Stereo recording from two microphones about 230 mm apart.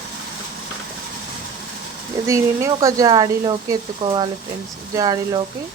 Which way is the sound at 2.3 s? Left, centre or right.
Centre.